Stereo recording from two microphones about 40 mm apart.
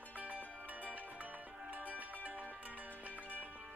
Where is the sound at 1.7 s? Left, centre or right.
Right.